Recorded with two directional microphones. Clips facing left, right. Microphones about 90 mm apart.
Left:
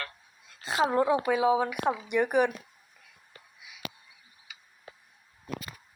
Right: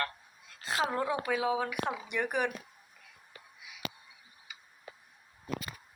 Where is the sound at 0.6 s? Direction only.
10° left (ahead or behind).